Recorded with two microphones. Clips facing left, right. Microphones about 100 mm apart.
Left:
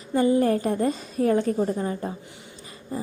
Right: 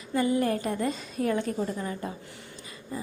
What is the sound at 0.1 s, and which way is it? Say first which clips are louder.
A woman's voice: left 5 dB; 30° left (ahead or behind).